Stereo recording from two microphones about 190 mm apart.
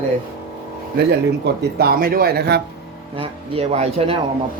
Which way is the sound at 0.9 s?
55° right (ahead or behind).